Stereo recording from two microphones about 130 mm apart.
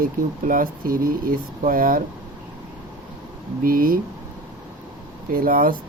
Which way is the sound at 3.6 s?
90° right.